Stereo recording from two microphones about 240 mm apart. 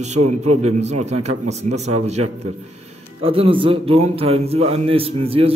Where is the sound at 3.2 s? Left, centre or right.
Right.